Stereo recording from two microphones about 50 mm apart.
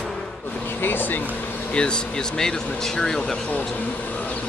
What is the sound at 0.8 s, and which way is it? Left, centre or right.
Speech, left.